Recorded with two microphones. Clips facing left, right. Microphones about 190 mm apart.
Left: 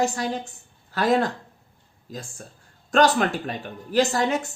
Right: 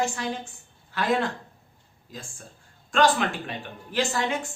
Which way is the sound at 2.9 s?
40° left (ahead or behind).